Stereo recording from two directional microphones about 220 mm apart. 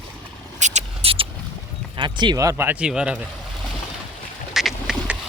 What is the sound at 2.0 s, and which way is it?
Speech, 20° right (ahead or behind).